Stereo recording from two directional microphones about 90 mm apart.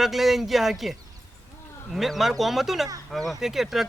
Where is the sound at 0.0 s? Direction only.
Centre (ahead or behind).